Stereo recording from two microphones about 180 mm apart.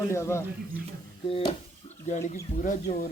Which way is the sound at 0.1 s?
15° left (ahead or behind).